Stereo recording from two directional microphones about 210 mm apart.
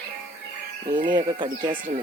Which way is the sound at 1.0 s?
20° right (ahead or behind).